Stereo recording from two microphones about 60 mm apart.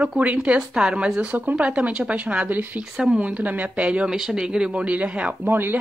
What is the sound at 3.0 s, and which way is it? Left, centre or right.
Speech, centre.